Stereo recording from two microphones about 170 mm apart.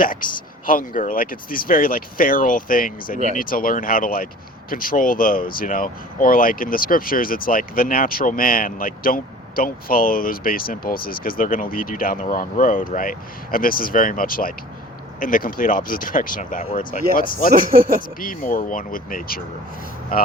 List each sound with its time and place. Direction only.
0.0 s speech: 55° left (ahead or behind)
17.5 s speech: 60° right (ahead or behind)
18.2 s speech: 55° left (ahead or behind)